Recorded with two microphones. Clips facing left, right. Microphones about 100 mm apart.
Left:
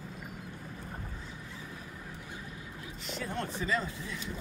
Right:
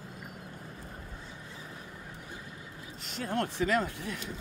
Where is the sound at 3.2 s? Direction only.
65° right (ahead or behind).